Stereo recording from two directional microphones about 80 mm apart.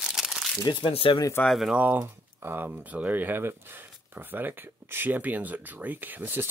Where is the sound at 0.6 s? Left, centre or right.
Left.